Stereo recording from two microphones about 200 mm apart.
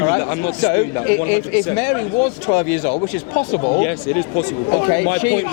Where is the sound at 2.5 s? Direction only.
30° left (ahead or behind).